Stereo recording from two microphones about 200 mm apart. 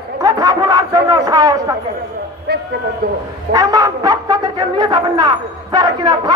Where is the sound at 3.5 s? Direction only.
15° right (ahead or behind).